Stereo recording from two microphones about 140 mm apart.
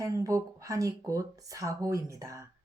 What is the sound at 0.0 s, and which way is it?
Speech, 25° right (ahead or behind).